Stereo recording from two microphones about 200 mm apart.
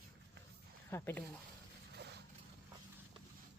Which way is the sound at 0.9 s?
10° left (ahead or behind).